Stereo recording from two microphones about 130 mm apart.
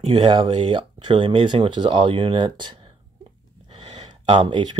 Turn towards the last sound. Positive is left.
turn(degrees=-35)  # may be behind; listen again after turning